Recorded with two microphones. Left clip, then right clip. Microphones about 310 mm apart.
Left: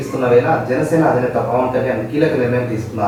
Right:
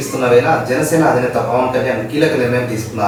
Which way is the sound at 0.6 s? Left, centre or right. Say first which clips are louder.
Right 1 dB; centre.